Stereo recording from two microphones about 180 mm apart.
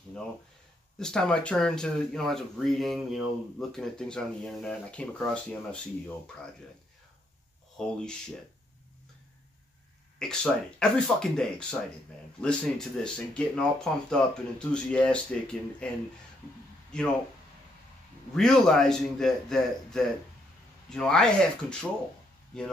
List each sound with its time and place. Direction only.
0.9 s speech: 5° left (ahead or behind)
7.7 s speech: 5° left (ahead or behind)
10.1 s speech: 5° left (ahead or behind)
16.9 s speech: 5° left (ahead or behind)
18.3 s speech: 5° left (ahead or behind)